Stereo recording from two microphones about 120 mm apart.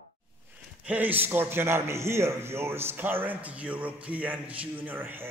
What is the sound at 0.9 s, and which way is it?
A man's voice, 15° right (ahead or behind).